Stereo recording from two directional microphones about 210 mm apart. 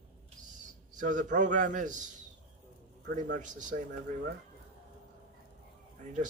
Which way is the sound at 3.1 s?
40° right (ahead or behind).